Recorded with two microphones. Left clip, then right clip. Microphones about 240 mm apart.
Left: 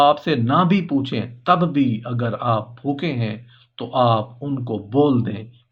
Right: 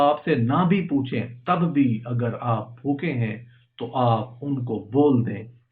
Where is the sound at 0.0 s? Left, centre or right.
Left.